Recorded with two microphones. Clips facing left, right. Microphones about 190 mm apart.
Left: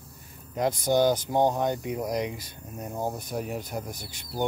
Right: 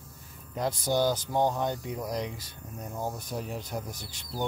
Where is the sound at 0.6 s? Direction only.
15° left (ahead or behind).